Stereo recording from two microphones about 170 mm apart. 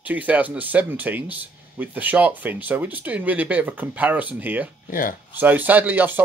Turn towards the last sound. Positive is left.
turn(degrees=-10)  # may be behind; listen again after turning